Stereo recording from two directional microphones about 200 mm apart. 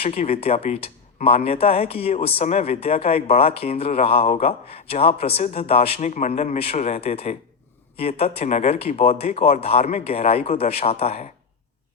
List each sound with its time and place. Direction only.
0.0 s speech: 30° left (ahead or behind)